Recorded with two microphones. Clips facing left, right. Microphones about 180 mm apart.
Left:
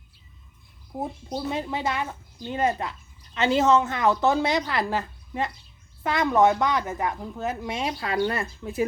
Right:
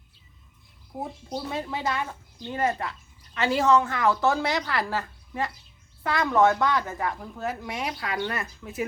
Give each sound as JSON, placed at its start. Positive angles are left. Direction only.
{"t": 1.5, "sound": "a woman's voice", "side_deg": 20}